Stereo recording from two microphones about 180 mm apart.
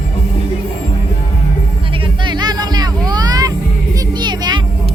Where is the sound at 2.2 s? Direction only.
25° right (ahead or behind).